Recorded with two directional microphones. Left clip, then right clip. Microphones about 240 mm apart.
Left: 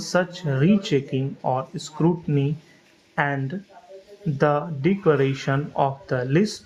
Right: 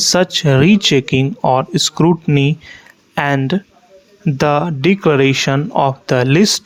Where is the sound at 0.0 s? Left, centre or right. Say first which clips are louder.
Right 10 dB; right.